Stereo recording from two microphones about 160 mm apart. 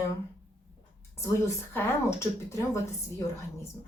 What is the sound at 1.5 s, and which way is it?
Speech, 15° left (ahead or behind).